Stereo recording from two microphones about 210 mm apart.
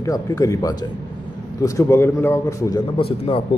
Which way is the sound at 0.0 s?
15° left (ahead or behind).